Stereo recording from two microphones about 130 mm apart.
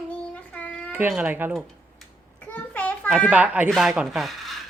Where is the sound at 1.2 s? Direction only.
15° right (ahead or behind).